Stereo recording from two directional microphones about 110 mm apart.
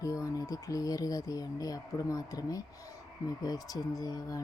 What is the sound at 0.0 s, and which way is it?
Speech, 30° left (ahead or behind).